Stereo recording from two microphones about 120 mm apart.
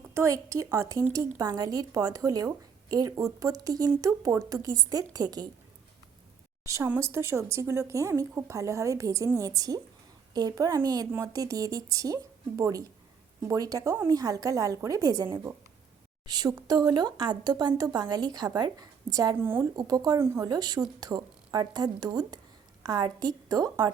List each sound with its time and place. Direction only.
0.1 s a woman's voice: 25° right (ahead or behind)
6.8 s a woman's voice: 20° right (ahead or behind)
19.4 s a woman's voice: 20° right (ahead or behind)
19.7 s speech: 35° right (ahead or behind)
20.1 s a woman's voice: 20° right (ahead or behind)
20.5 s speech: 35° right (ahead or behind)